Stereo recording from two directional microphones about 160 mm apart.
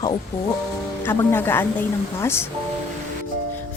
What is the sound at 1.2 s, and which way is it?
A woman's voice, 15° left (ahead or behind).